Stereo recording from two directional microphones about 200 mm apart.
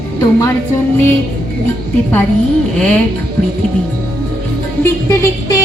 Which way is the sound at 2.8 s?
5° left (ahead or behind).